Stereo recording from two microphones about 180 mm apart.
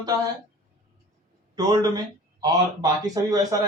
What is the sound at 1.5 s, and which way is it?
Speech, 20° right (ahead or behind).